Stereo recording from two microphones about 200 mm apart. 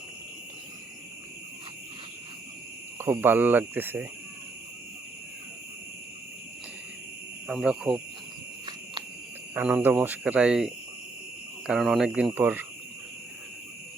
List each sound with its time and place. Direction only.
3.0 s speech: 10° right (ahead or behind)
7.4 s speech: 5° right (ahead or behind)
9.6 s speech: 10° right (ahead or behind)